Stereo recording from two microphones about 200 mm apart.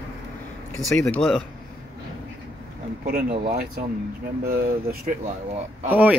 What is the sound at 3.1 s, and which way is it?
Speech, 50° right (ahead or behind).